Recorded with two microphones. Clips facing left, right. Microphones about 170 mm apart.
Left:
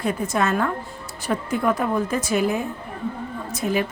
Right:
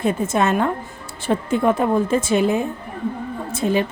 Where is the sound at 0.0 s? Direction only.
25° right (ahead or behind).